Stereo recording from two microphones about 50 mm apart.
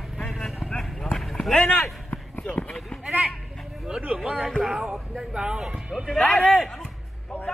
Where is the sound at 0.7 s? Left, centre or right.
Centre.